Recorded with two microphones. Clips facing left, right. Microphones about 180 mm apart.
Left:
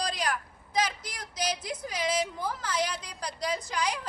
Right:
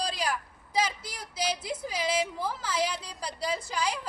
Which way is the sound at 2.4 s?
5° right (ahead or behind).